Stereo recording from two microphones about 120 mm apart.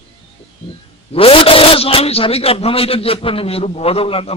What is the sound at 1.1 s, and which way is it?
A man's voice, 50° left (ahead or behind).